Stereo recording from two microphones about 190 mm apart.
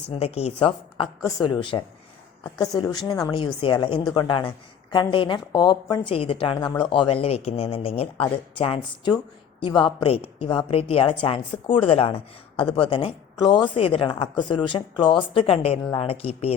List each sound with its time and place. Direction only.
0.1 s a woman's voice: 35° left (ahead or behind)